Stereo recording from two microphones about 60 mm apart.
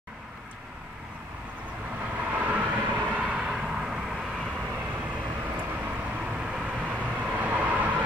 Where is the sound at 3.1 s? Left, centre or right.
Centre.